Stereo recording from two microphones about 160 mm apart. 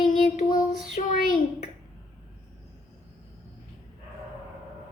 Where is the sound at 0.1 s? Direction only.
60° left (ahead or behind).